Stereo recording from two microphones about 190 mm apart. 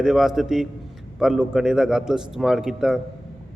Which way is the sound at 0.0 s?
Centre (ahead or behind).